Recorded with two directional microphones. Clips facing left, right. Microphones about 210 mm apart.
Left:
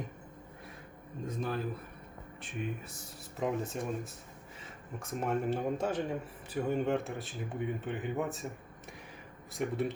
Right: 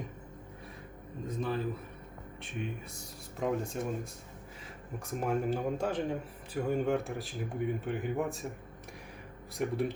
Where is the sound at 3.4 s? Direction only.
Centre (ahead or behind).